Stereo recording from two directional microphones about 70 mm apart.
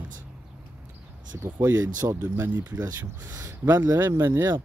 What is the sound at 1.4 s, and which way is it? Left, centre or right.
Speech, right.